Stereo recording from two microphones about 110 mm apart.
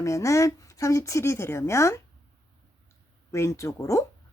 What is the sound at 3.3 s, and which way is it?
Speech, 25° left (ahead or behind).